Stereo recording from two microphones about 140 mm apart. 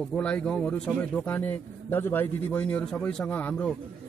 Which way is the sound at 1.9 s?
15° left (ahead or behind).